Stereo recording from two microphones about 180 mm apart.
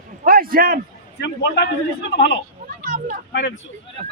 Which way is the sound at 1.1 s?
70° left (ahead or behind).